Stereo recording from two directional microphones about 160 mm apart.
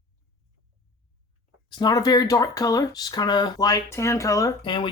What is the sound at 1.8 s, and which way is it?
Speech, 25° left (ahead or behind).